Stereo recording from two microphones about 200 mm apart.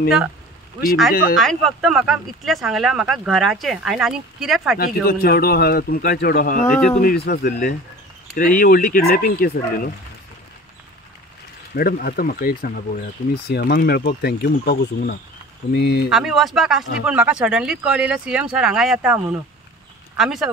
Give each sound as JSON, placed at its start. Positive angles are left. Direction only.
{"t": 1.3, "sound": "speech", "side_deg": 0}
{"t": 4.7, "sound": "speech", "side_deg": 45}
{"t": 11.7, "sound": "speech", "side_deg": 50}
{"t": 16.1, "sound": "speech", "side_deg": 0}